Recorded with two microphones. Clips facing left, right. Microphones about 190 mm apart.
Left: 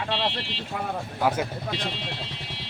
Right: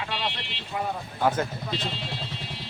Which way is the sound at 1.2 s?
10° left (ahead or behind).